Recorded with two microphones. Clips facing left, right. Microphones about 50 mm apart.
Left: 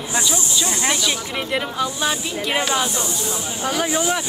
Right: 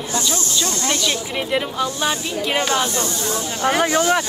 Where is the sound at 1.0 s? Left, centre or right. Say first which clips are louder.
Right 1 dB; centre.